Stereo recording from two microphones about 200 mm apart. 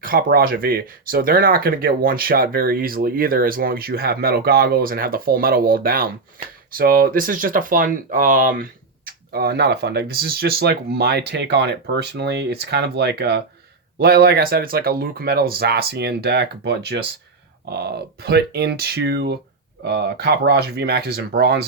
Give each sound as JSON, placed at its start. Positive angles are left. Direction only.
{"t": 0.0, "sound": "speech", "side_deg": -45}